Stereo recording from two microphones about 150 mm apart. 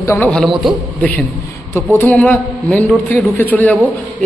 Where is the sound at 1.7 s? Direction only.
15° left (ahead or behind).